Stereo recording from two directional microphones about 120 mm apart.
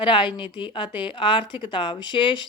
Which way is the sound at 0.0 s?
40° left (ahead or behind).